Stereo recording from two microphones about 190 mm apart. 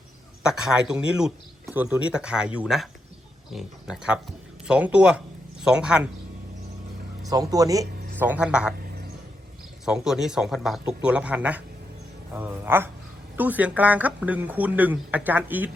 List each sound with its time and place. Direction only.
0.4 s speech: 5° right (ahead or behind)
7.3 s speech: 20° right (ahead or behind)
8.2 s speech: 5° right (ahead or behind)
9.8 s speech: 5° right (ahead or behind)